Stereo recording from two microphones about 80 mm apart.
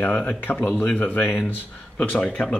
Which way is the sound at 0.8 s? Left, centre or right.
Left.